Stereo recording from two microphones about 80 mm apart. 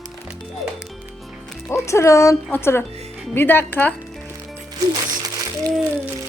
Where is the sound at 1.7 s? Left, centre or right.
Left.